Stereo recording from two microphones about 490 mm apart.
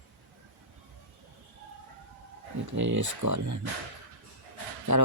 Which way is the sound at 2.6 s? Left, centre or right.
Right.